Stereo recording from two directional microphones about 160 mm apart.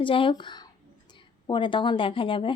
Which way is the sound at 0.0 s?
35° left (ahead or behind).